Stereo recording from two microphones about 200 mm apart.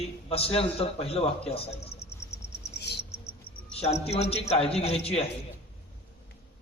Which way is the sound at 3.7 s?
30° left (ahead or behind).